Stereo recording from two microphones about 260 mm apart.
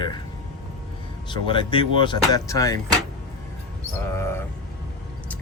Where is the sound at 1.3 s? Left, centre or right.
Centre.